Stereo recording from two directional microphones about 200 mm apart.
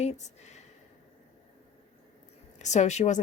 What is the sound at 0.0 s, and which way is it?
Speech, 35° left (ahead or behind).